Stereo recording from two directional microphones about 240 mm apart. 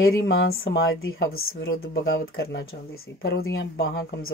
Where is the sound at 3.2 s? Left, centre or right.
Left.